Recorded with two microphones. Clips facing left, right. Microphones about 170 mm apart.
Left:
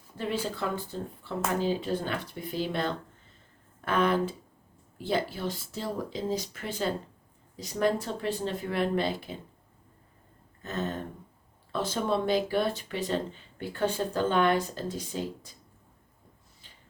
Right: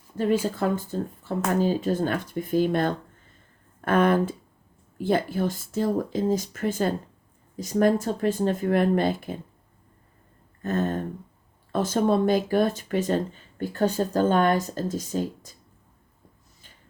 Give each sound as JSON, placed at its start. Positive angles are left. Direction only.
{"t": 0.2, "sound": "speech", "side_deg": -45}
{"t": 10.6, "sound": "a sound", "side_deg": -50}
{"t": 11.7, "sound": "speech", "side_deg": -45}